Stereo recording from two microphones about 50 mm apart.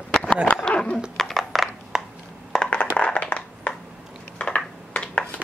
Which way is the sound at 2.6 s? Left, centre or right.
Left.